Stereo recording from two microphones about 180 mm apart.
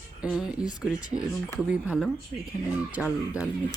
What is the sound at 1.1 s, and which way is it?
Speech, 35° right (ahead or behind).